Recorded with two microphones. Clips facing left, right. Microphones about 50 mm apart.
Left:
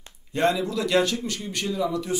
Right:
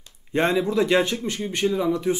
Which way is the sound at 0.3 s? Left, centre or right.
Right.